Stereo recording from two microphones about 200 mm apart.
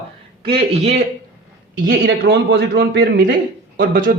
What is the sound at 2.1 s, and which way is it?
A man's voice, 55° right (ahead or behind).